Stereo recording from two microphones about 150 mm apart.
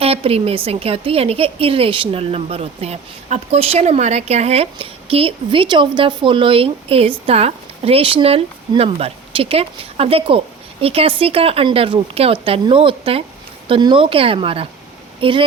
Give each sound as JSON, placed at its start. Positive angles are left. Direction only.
{"t": 0.0, "sound": "a woman's voice", "side_deg": -40}